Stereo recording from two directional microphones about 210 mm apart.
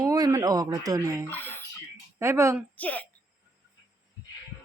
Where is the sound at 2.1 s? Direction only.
10° right (ahead or behind).